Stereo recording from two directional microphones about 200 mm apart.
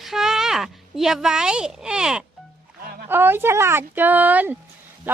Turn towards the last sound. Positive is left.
turn(degrees=-10)  # may be behind; listen again after turning